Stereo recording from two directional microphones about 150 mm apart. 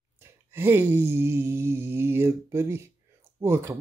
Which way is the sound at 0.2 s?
15° right (ahead or behind).